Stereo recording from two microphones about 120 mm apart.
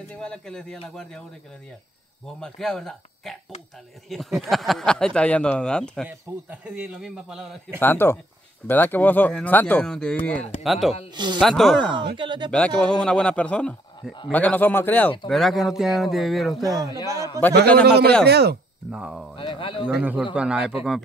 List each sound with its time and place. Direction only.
0.1 s speech: 5° left (ahead or behind)
2.2 s speech: 5° left (ahead or behind)
6.0 s a man's voice: 10° right (ahead or behind)
7.8 s speech: 15° left (ahead or behind)
10.6 s speech: centre (ahead or behind)
11.9 s speech: 40° right (ahead or behind)
12.4 s speech: 10° left (ahead or behind)
15.2 s speech: centre (ahead or behind)
16.6 s speech: 30° right (ahead or behind)
17.4 s speech: 15° left (ahead or behind)
18.9 s a man's voice: 5° right (ahead or behind)
19.3 s speech: 45° left (ahead or behind)
20.0 s a man's voice: 15° right (ahead or behind)